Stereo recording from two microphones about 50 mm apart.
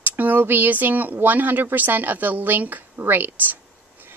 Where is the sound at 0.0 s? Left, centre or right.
Right.